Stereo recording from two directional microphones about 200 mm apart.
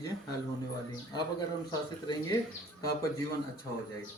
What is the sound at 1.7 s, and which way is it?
Speech, 20° left (ahead or behind).